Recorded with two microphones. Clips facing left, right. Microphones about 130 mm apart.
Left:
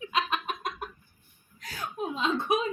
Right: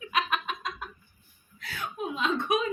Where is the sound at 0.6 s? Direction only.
50° left (ahead or behind).